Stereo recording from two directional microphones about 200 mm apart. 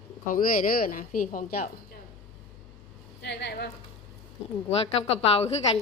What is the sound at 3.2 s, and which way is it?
Speech, 60° left (ahead or behind).